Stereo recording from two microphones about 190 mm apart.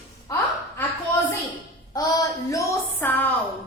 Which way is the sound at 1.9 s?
20° left (ahead or behind).